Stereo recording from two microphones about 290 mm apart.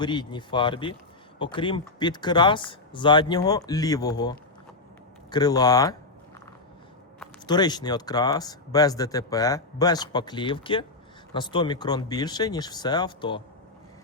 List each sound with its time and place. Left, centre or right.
0.0 s speech: centre
7.4 s speech: centre